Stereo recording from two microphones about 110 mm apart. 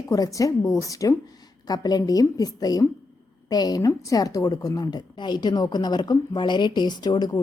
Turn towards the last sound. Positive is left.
turn(degrees=40)  # may be behind; listen again after turning